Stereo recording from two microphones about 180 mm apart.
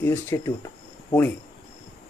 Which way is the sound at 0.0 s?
15° left (ahead or behind).